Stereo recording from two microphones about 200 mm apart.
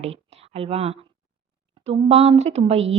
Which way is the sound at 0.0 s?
30° right (ahead or behind).